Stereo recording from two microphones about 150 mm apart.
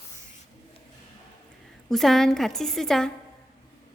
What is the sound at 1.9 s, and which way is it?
A woman's voice, centre (ahead or behind).